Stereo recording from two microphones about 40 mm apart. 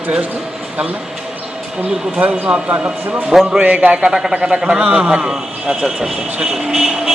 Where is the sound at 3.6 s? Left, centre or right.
Right.